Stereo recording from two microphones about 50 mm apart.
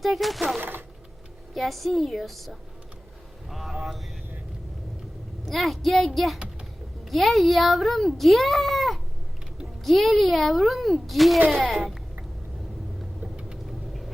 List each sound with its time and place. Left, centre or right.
0.0 s speech: centre
0.6 s a sound: right
1.5 s a child's voice: centre
3.5 s vehicle: centre
5.5 s a child's voice: centre